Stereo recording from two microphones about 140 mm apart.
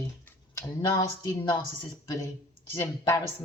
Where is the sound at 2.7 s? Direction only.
20° left (ahead or behind).